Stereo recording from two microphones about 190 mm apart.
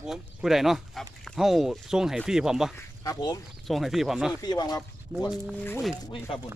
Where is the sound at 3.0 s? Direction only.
20° left (ahead or behind).